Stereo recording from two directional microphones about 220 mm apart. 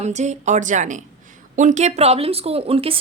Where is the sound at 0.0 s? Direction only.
30° right (ahead or behind).